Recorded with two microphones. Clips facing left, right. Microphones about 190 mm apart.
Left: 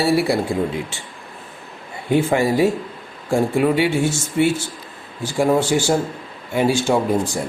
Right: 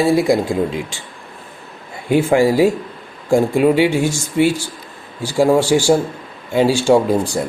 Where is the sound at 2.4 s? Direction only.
90° right.